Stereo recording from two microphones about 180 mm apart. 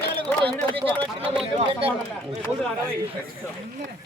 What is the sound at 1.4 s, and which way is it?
Speech, 30° right (ahead or behind).